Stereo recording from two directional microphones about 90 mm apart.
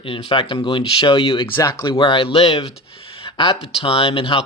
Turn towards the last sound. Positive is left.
turn(degrees=85)